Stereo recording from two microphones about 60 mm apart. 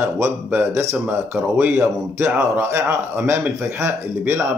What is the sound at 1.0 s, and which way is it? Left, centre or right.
Speech, right.